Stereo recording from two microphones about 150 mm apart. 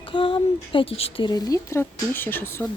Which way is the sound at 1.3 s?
25° left (ahead or behind).